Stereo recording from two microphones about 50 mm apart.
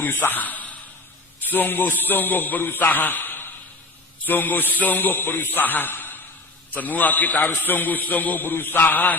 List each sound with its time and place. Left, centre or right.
0.0 s a man's voice: left
6.7 s a man's voice: left